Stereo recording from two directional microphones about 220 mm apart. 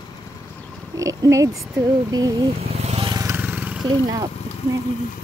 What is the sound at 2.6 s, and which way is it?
Vehicle, 30° right (ahead or behind).